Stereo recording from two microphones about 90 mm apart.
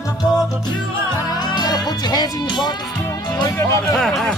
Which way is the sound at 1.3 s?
50° left (ahead or behind).